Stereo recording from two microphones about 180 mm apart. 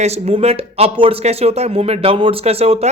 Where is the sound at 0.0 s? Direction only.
35° right (ahead or behind).